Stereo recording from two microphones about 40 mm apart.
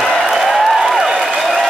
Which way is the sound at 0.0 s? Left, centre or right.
Centre.